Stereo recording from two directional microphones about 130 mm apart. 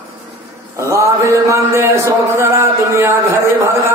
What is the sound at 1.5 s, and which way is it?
A man's voice, 20° right (ahead or behind).